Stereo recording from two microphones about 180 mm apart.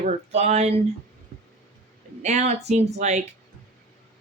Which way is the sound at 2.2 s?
40° right (ahead or behind).